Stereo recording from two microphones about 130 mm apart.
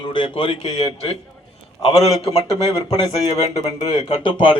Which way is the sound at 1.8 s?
50° left (ahead or behind).